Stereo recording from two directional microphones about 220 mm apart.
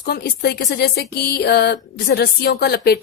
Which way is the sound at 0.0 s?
45° left (ahead or behind).